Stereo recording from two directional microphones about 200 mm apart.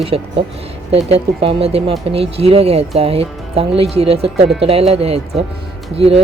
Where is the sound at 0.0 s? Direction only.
30° right (ahead or behind).